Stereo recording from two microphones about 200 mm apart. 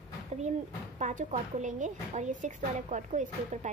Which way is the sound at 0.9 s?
35° right (ahead or behind).